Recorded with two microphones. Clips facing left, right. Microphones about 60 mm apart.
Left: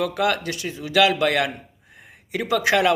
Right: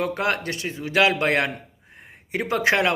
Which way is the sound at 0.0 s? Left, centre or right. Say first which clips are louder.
Left 2 dB; right.